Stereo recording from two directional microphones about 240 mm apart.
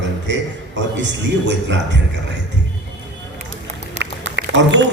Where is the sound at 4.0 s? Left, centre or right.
Right.